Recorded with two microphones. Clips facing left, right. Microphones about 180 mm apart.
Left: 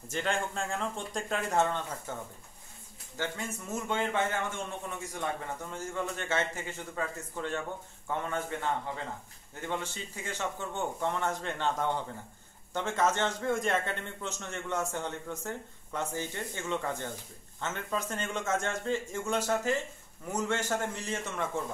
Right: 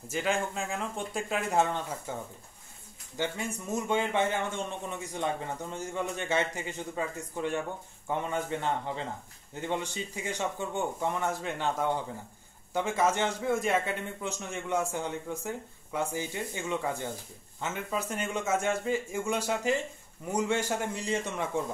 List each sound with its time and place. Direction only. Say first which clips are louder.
0.1 s a man's voice: right 2 dB; 5° right (ahead or behind)
3.2 s a man's voice: right 3 dB; 15° right (ahead or behind)